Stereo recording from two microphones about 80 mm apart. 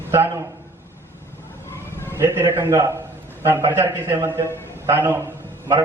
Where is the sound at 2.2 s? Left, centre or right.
Right.